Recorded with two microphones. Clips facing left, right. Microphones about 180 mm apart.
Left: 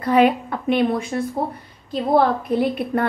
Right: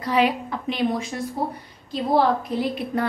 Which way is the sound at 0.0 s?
55° left (ahead or behind).